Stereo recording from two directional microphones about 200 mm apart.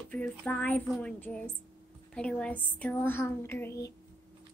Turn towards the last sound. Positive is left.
turn(degrees=10)  # may be behind; listen again after turning